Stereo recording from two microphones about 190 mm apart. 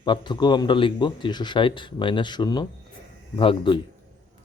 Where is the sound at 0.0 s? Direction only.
25° left (ahead or behind).